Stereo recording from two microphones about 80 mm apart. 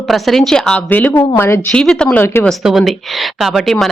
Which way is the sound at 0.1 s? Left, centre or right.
Centre.